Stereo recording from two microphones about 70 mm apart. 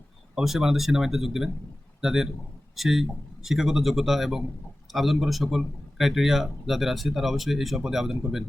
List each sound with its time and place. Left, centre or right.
0.3 s speech: centre